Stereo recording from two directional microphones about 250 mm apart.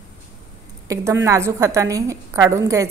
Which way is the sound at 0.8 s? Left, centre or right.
Centre.